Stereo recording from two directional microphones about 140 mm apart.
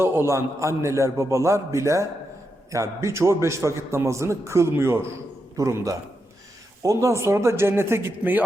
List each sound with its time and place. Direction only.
0.0 s a man's voice: 15° right (ahead or behind)